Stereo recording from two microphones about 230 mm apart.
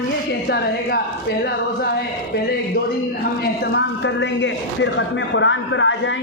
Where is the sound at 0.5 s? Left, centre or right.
Left.